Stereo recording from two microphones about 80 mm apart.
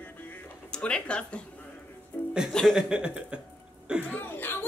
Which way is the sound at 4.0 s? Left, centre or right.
Left.